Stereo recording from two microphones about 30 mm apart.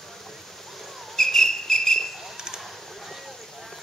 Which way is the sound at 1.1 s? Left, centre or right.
Centre.